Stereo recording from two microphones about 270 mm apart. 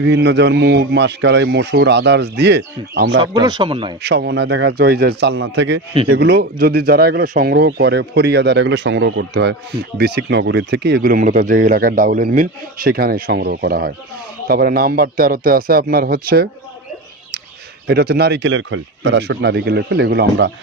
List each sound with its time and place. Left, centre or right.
0.0 s speech: right
3.2 s speech: centre
4.0 s speech: right
17.8 s speech: right